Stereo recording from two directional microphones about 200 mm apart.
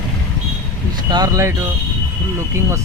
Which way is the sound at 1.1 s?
20° right (ahead or behind).